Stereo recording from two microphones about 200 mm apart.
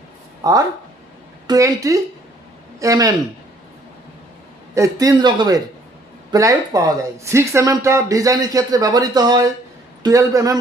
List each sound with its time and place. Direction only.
1.5 s speech: 15° right (ahead or behind)
4.7 s speech: 15° right (ahead or behind)